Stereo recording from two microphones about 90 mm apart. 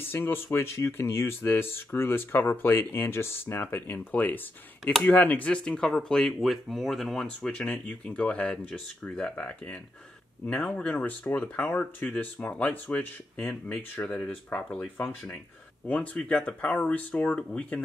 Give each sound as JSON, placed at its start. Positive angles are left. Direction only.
{"t": 0.1, "sound": "speech", "side_deg": 25}
{"t": 15.0, "sound": "speech", "side_deg": 25}